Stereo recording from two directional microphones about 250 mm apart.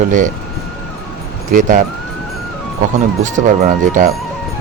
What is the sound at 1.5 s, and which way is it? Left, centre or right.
Speech, right.